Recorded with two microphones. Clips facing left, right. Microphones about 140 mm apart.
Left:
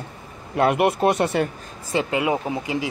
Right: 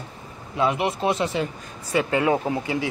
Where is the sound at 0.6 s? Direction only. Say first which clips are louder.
Left 4 dB; 60° left (ahead or behind).